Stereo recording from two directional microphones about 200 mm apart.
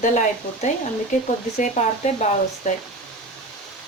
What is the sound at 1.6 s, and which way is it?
Speech, 35° left (ahead or behind).